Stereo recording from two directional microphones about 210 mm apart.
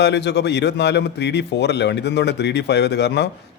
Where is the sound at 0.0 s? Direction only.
55° left (ahead or behind).